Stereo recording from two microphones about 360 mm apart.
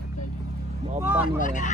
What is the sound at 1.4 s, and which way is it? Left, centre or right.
Speech, left.